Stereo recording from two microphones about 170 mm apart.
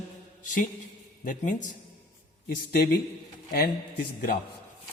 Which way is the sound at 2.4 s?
65° left (ahead or behind).